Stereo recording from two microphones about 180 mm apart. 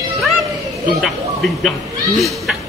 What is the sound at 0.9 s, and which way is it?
Speech, centre (ahead or behind).